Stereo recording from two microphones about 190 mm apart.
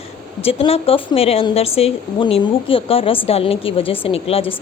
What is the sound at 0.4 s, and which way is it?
A woman's voice, 30° left (ahead or behind).